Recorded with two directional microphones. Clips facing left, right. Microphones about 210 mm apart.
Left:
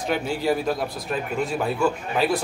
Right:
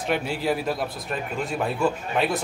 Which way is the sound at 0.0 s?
Centre (ahead or behind).